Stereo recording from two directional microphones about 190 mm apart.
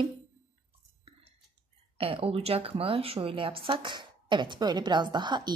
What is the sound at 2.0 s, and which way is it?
A woman's voice, 30° right (ahead or behind).